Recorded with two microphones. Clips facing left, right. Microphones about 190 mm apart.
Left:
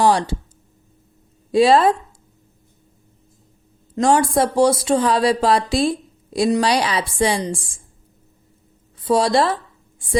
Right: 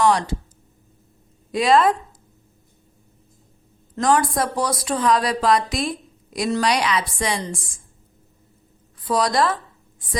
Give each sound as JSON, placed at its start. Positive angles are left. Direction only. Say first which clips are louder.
{"t": 0.0, "sound": "a woman's voice", "louder": "left 2 dB", "side_deg": 30}
{"t": 1.5, "sound": "a woman's voice", "louder": "left 3 dB", "side_deg": 30}
{"t": 4.0, "sound": "a woman's voice", "louder": "left 3 dB", "side_deg": 25}
{"t": 9.0, "sound": "a woman's voice", "louder": "left 4 dB", "side_deg": 25}